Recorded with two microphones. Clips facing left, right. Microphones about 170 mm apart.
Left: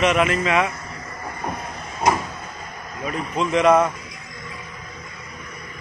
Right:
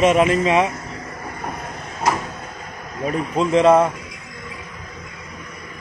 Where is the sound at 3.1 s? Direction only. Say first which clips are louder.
Right 4 dB; 35° right (ahead or behind).